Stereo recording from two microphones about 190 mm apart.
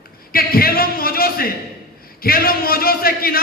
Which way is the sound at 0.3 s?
50° left (ahead or behind).